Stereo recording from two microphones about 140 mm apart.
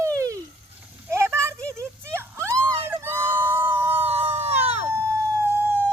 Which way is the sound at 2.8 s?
15° right (ahead or behind).